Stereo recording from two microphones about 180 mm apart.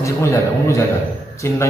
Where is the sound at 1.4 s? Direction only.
15° left (ahead or behind).